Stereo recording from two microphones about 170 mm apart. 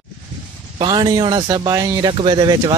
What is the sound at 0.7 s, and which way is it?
Speech, 25° right (ahead or behind).